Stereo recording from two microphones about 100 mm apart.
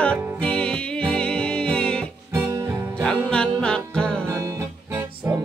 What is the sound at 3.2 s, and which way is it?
Music, 10° left (ahead or behind).